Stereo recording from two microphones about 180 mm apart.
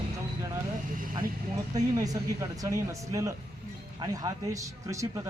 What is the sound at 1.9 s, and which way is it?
Speech, 20° right (ahead or behind).